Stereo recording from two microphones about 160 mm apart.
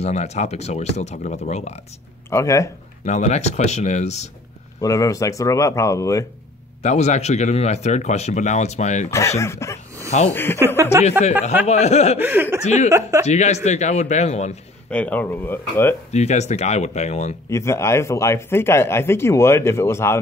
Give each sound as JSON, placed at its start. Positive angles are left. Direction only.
{"t": 0.0, "sound": "speech", "side_deg": 45}
{"t": 2.3, "sound": "speech", "side_deg": 20}
{"t": 3.1, "sound": "speech", "side_deg": 45}
{"t": 4.8, "sound": "speech", "side_deg": 20}
{"t": 6.8, "sound": "speech", "side_deg": 45}
{"t": 9.4, "sound": "speech", "side_deg": 15}
{"t": 10.9, "sound": "speech", "side_deg": -20}
{"t": 11.6, "sound": "speech", "side_deg": 45}
{"t": 12.2, "sound": "speech", "side_deg": -10}
{"t": 12.6, "sound": "speech", "side_deg": 45}
{"t": 14.9, "sound": "speech", "side_deg": 10}
{"t": 16.1, "sound": "speech", "side_deg": 45}
{"t": 17.5, "sound": "speech", "side_deg": 15}